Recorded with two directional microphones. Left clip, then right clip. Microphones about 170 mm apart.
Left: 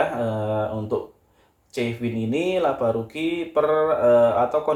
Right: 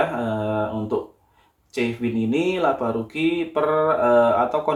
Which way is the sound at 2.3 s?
20° right (ahead or behind).